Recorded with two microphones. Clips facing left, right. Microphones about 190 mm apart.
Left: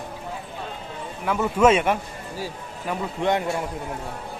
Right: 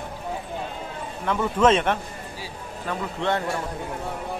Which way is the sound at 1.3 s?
10° left (ahead or behind).